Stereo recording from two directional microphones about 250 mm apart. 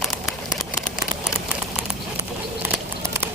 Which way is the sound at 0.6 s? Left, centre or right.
Centre.